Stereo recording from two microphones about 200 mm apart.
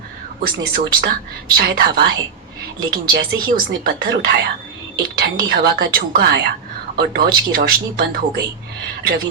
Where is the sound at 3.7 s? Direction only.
50° right (ahead or behind).